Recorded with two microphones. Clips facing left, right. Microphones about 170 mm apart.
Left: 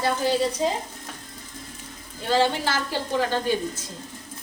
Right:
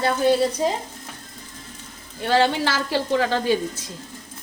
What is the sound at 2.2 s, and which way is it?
Speech, 75° right (ahead or behind).